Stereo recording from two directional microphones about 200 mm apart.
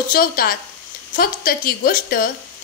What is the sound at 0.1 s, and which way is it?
Speech, 45° left (ahead or behind).